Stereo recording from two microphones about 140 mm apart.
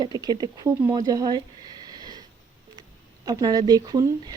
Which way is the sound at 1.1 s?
30° right (ahead or behind).